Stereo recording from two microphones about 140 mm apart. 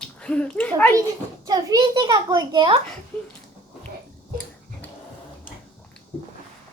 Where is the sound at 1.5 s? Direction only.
30° right (ahead or behind).